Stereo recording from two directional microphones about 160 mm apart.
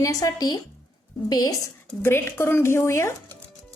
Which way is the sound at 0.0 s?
20° left (ahead or behind).